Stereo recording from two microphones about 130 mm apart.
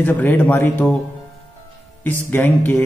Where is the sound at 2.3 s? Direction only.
15° left (ahead or behind).